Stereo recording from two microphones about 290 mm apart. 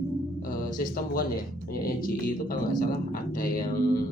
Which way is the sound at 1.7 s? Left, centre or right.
Left.